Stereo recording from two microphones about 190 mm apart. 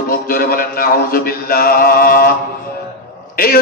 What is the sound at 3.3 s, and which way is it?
Speech, 50° left (ahead or behind).